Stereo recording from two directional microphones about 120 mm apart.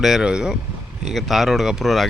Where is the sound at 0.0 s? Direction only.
5° right (ahead or behind).